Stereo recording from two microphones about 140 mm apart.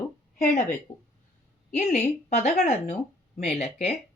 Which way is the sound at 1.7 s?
55° left (ahead or behind).